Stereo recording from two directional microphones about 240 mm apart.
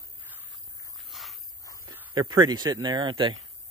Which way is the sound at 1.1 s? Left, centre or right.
Centre.